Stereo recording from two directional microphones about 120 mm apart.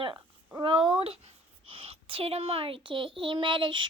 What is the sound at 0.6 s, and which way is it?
A child's voice, 45° right (ahead or behind).